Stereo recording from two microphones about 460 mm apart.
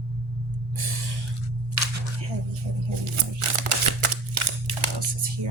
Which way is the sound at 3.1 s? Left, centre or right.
Right.